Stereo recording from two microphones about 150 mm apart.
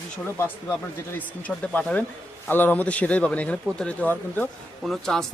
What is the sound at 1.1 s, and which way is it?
Speech, 10° left (ahead or behind).